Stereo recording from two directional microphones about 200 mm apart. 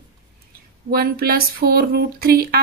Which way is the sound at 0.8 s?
50° right (ahead or behind).